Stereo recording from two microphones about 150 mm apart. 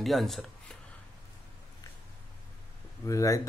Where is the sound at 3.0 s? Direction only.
20° left (ahead or behind).